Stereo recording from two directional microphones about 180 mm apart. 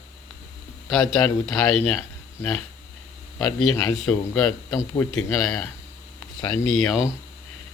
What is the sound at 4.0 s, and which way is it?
Speech, 5° left (ahead or behind).